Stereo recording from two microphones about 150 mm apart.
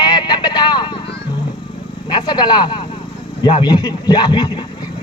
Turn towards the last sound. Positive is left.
turn(degrees=30)  # may be behind; listen again after turning